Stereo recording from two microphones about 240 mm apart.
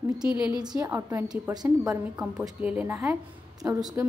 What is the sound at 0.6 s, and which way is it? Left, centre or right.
A woman's voice, centre.